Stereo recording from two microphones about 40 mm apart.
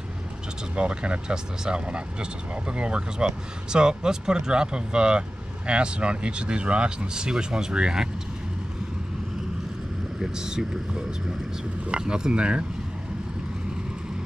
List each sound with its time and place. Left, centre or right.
0.7 s speech: right
10.1 s speech: centre